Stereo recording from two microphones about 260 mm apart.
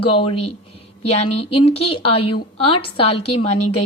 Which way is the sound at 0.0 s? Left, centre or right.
Left.